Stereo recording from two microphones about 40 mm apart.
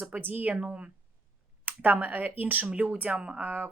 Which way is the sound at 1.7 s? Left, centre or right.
Right.